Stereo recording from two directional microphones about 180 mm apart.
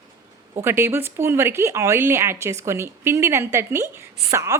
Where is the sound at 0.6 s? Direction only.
15° right (ahead or behind).